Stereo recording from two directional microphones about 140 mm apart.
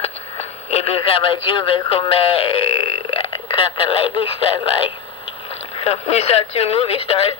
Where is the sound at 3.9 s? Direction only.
40° left (ahead or behind).